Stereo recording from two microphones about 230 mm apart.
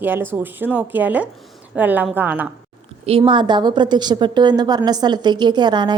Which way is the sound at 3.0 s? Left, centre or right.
Right.